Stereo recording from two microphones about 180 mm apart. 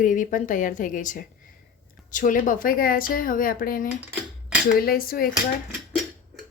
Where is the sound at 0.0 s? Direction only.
45° left (ahead or behind).